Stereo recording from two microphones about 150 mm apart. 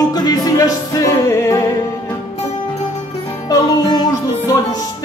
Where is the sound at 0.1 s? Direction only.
25° left (ahead or behind).